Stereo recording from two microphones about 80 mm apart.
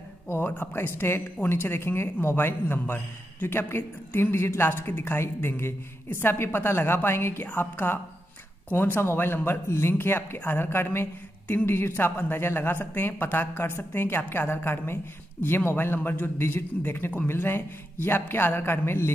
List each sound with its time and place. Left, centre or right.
0.3 s a man's voice: left